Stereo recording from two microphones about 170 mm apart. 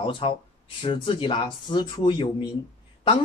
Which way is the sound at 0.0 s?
30° left (ahead or behind).